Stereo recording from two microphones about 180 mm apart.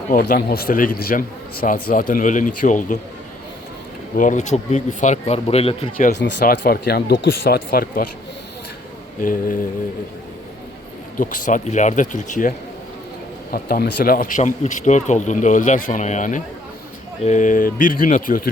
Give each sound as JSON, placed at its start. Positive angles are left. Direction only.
{"t": 0.1, "sound": "speech", "side_deg": 50}
{"t": 4.2, "sound": "speech", "side_deg": 45}
{"t": 6.1, "sound": "speech", "side_deg": 65}
{"t": 9.2, "sound": "speech", "side_deg": 50}
{"t": 11.2, "sound": "speech", "side_deg": 50}
{"t": 13.5, "sound": "speech", "side_deg": 55}